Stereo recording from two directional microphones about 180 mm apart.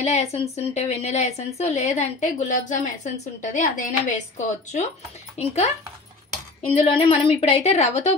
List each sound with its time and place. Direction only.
0.0 s a woman's voice: 35° left (ahead or behind)
6.6 s a woman's voice: 30° left (ahead or behind)